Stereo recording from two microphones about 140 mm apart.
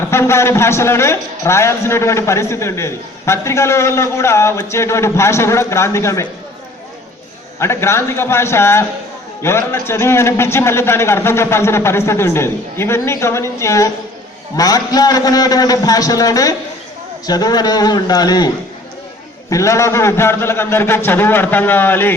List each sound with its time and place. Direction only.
0.1 s a man's voice: 20° left (ahead or behind)
7.6 s a man's voice: 20° left (ahead or behind)